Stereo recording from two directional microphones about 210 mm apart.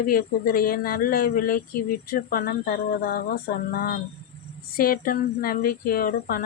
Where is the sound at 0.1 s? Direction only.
45° left (ahead or behind).